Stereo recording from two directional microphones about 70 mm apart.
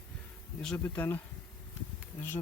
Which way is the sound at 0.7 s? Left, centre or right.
Left.